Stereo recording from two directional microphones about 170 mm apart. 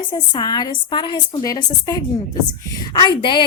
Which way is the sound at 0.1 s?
25° left (ahead or behind).